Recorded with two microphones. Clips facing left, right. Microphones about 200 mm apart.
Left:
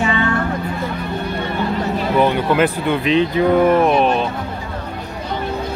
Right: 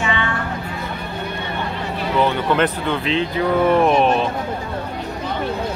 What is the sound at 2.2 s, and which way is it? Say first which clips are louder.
Speech: left 2 dB; 10° left (ahead or behind).